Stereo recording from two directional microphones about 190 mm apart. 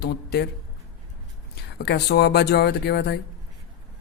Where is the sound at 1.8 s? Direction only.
55° left (ahead or behind).